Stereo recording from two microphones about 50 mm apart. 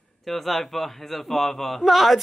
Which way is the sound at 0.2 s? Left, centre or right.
Centre.